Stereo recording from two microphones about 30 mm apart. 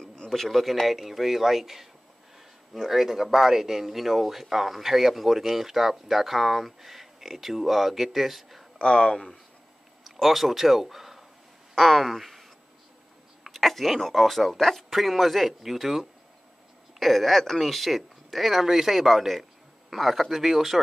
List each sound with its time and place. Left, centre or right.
0.0 s a sound: left
0.3 s speech: centre
2.9 s speech: centre
8.7 s speech: left
10.2 s speech: centre
17.0 s speech: centre